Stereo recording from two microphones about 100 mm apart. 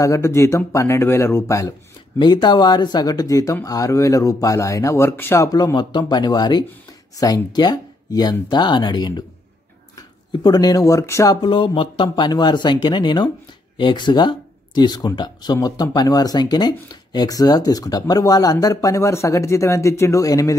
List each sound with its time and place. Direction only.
0.0 s speech: 30° left (ahead or behind)
2.1 s speech: 50° left (ahead or behind); by 11.3 s 30° left (ahead or behind)
11.4 s speech: 55° left (ahead or behind); by 20.5 s 35° left (ahead or behind)